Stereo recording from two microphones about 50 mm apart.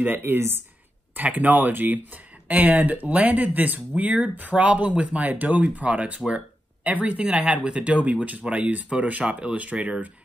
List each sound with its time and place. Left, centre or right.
0.2 s speech: right
1.1 s speech: right